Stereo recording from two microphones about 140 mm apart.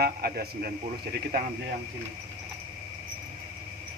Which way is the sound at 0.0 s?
90° right.